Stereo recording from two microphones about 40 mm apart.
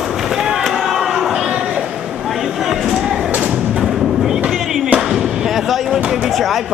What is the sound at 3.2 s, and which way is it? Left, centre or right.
Thump, right.